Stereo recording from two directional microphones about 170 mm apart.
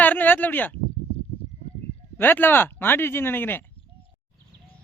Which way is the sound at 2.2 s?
10° left (ahead or behind).